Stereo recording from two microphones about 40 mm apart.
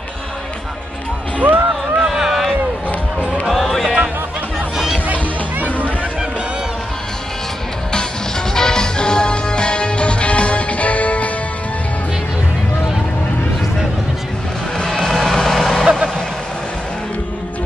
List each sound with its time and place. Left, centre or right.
1.4 s speech: right
2.0 s a sound: centre
5.0 s music: right
8.5 s music: centre; by 11.2 s left
15.3 s vehicle: centre
15.8 s vehicle: centre